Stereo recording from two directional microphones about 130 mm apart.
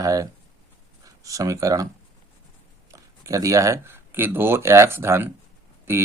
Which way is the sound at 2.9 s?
25° right (ahead or behind).